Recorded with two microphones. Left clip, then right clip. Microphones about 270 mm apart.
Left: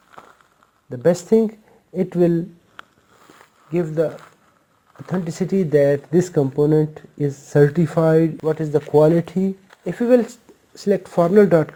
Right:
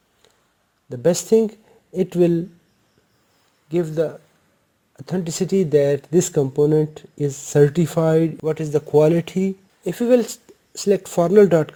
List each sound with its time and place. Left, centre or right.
0.9 s speech: right
3.7 s speech: right